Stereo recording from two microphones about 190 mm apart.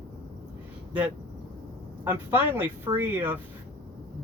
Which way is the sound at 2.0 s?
10° right (ahead or behind).